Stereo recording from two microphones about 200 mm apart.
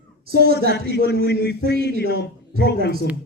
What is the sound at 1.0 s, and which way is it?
A man's voice, 55° left (ahead or behind).